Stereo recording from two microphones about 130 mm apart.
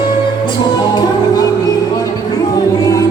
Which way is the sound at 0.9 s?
30° left (ahead or behind).